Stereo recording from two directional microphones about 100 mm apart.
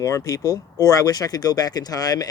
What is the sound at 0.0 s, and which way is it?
Speech, 35° left (ahead or behind).